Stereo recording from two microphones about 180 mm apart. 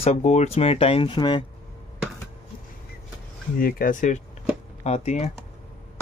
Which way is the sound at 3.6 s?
55° left (ahead or behind).